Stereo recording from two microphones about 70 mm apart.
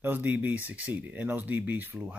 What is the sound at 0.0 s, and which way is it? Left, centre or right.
Speech, right.